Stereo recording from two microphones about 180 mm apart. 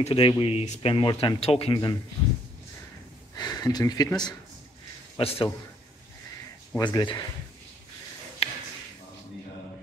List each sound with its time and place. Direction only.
0.0 s speech: 30° left (ahead or behind)
3.3 s a man's voice: 20° left (ahead or behind)
6.8 s speech: 25° left (ahead or behind)
8.4 s a sound: 35° left (ahead or behind)